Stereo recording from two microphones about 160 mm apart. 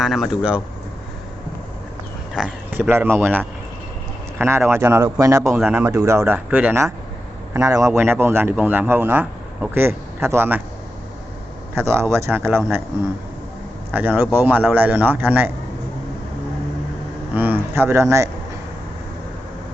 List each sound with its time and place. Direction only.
0.0 s speech: centre (ahead or behind)
2.3 s a man's voice: 10° right (ahead or behind)
11.7 s a man's voice: 15° right (ahead or behind)
13.9 s a man's voice: 10° right (ahead or behind)
17.3 s speech: 10° right (ahead or behind)